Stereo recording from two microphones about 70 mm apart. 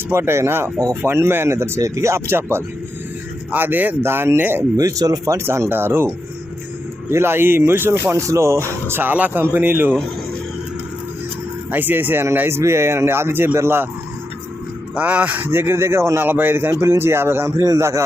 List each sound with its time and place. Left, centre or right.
0.1 s speech: right
4.8 s speech: right
5.5 s speech: right
8.9 s speech: right
11.7 s speech: right
14.9 s speech: centre; by 17.5 s right
17.6 s a man's voice: right